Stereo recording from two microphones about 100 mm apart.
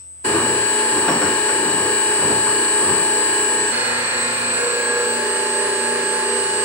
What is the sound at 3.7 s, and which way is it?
Music, 20° right (ahead or behind).